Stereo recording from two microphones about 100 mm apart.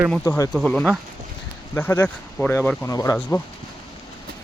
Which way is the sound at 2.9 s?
35° left (ahead or behind).